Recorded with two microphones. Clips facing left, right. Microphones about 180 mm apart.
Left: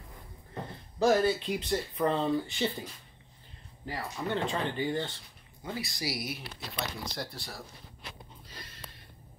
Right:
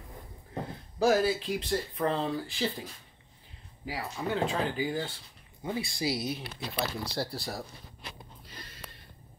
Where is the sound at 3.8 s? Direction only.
5° right (ahead or behind).